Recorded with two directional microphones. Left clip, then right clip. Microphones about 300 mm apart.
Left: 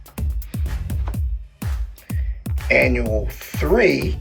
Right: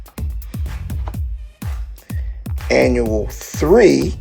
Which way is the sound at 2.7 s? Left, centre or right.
Centre.